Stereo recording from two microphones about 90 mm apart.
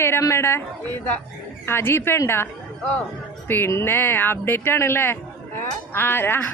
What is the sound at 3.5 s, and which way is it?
A woman's voice, 25° left (ahead or behind).